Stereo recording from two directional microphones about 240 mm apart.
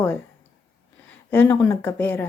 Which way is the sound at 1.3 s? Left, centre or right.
Centre.